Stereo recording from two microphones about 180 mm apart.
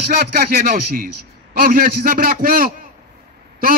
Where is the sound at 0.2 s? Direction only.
55° right (ahead or behind).